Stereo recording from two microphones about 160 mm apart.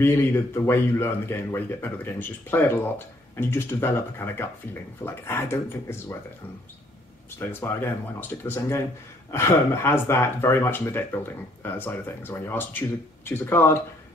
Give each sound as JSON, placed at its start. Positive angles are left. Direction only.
{"t": 0.7, "sound": "speech", "side_deg": 15}
{"t": 7.3, "sound": "speech", "side_deg": 15}